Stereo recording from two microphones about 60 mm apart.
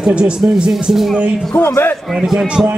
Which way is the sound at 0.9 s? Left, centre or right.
Centre.